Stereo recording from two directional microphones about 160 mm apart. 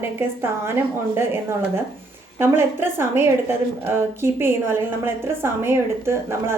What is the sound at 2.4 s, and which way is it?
A woman's voice, 15° right (ahead or behind).